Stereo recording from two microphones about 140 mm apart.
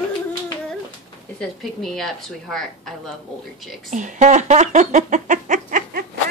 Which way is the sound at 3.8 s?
60° right (ahead or behind).